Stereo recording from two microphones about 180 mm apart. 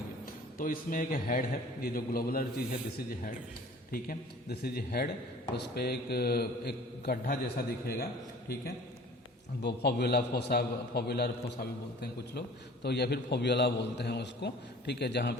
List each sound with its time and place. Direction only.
0.6 s a man's voice: 50° left (ahead or behind)
3.9 s a man's voice: 55° left (ahead or behind)
9.6 s a man's voice: 65° left (ahead or behind)
12.8 s a man's voice: 65° left (ahead or behind)